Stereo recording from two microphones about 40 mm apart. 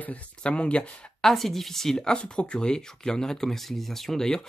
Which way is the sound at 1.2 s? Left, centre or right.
Centre.